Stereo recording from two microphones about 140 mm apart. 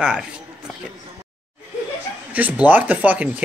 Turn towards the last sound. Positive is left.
turn(degrees=-10)  # may be behind; listen again after turning